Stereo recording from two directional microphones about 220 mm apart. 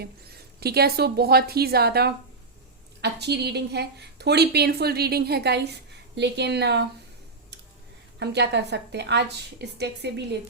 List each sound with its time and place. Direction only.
0.6 s a woman's voice: 45° right (ahead or behind)
8.2 s a woman's voice: 50° right (ahead or behind)